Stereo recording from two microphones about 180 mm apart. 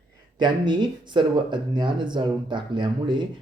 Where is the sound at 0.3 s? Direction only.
25° right (ahead or behind).